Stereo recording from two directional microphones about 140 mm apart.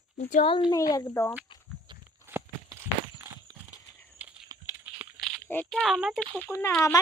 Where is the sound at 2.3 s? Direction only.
15° right (ahead or behind).